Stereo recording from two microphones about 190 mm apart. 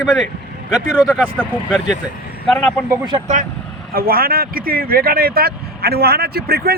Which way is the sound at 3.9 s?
50° right (ahead or behind).